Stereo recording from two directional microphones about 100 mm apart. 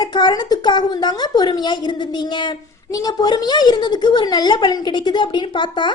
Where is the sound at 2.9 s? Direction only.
40° left (ahead or behind).